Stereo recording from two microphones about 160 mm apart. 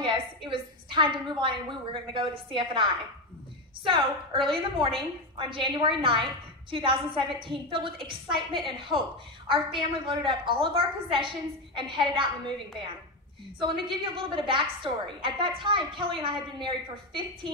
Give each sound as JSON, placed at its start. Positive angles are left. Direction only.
{"t": 0.0, "sound": "a woman's voice", "side_deg": -30}
{"t": 13.6, "sound": "a woman's voice", "side_deg": -30}